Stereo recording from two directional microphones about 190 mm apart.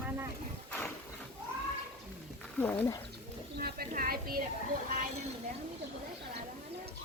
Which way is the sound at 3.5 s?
50° right (ahead or behind).